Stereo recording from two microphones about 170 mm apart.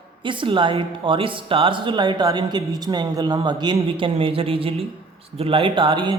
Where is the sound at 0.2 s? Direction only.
30° right (ahead or behind).